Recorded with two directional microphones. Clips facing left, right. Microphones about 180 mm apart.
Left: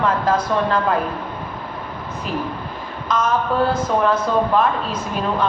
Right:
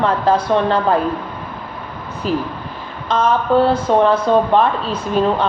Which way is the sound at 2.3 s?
30° right (ahead or behind).